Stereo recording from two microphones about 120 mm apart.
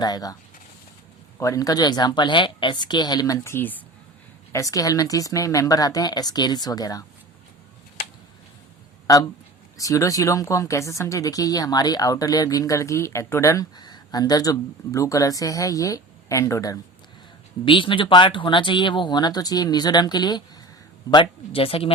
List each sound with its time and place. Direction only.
0.0 s speech: 30° left (ahead or behind)
1.4 s speech: 25° left (ahead or behind)
4.5 s speech: 30° left (ahead or behind)
9.1 s speech: 30° left (ahead or behind)
17.7 s speech: 45° left (ahead or behind)
21.1 s speech: 45° left (ahead or behind)